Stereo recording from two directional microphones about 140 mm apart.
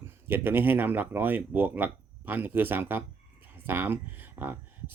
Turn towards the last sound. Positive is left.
turn(degrees=-15)  # may be behind; listen again after turning